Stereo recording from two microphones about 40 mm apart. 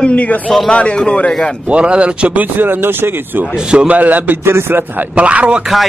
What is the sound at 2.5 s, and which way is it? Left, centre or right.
Speech, right.